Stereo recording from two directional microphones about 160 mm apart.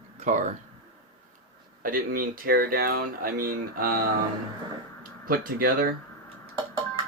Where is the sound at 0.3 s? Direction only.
50° right (ahead or behind).